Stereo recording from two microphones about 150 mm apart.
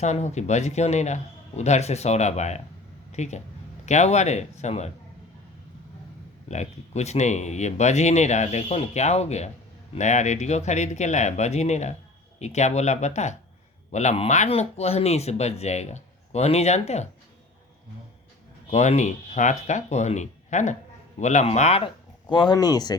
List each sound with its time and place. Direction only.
0.0 s speech: 50° left (ahead or behind)
6.5 s speech: 50° left (ahead or behind)
18.7 s speech: 50° left (ahead or behind)
22.3 s speech: 30° left (ahead or behind)